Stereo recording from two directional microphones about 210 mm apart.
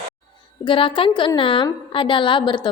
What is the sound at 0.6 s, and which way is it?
A woman's voice, 25° left (ahead or behind).